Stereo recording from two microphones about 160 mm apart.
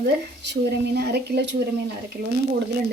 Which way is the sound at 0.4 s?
90° right.